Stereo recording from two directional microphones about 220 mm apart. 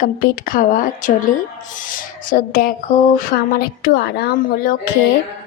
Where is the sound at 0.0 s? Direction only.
40° left (ahead or behind).